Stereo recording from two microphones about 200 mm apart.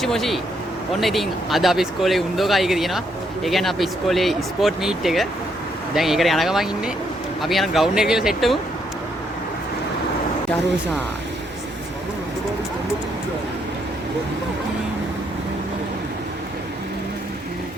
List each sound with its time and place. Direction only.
0.0 s speech: centre (ahead or behind)